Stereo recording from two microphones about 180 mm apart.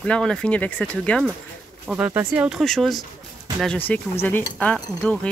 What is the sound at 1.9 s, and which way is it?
Speech, 10° right (ahead or behind).